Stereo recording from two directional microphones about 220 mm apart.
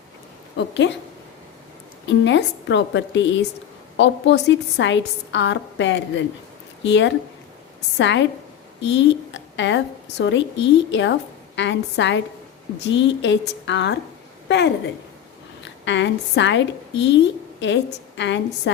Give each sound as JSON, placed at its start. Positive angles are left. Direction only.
{"t": 0.5, "sound": "a woman's voice", "side_deg": 55}
{"t": 2.0, "sound": "a woman's voice", "side_deg": 55}